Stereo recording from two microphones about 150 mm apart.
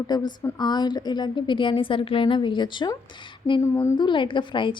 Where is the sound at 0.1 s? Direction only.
25° left (ahead or behind).